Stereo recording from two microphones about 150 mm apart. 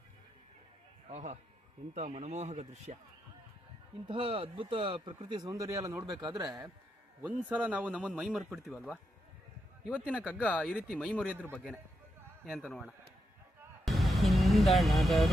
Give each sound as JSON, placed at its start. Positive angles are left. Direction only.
{"t": 1.0, "sound": "a man's voice", "side_deg": -50}
{"t": 4.0, "sound": "speech", "side_deg": -35}
{"t": 7.2, "sound": "a man's voice", "side_deg": -10}
{"t": 10.2, "sound": "a man's voice", "side_deg": -10}
{"t": 10.5, "sound": "a man's voice", "side_deg": 10}
{"t": 13.8, "sound": "vehicle", "side_deg": 0}